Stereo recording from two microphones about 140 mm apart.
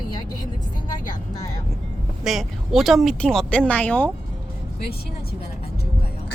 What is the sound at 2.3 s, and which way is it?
Speech, centre (ahead or behind).